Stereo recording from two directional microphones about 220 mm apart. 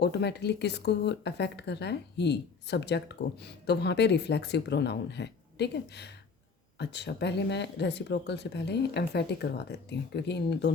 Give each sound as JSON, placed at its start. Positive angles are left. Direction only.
{"t": 0.0, "sound": "a woman's voice", "side_deg": 50}